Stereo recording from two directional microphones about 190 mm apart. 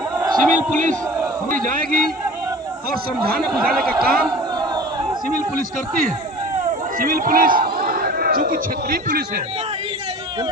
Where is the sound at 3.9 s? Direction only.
20° right (ahead or behind).